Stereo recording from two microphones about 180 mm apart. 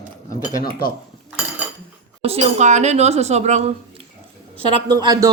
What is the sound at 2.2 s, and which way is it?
A woman's voice, 35° right (ahead or behind).